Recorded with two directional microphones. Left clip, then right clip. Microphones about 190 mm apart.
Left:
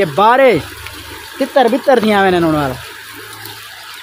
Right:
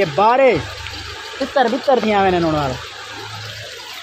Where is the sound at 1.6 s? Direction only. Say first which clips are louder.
Left 4 dB; 30° left (ahead or behind).